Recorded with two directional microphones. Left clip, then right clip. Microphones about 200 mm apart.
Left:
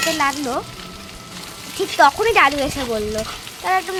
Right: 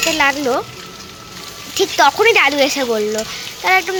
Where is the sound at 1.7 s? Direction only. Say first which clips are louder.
Right 2 dB; centre (ahead or behind).